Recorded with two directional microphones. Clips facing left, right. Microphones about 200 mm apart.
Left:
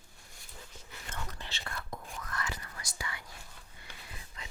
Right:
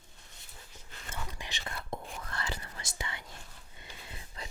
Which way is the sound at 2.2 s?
30° right (ahead or behind).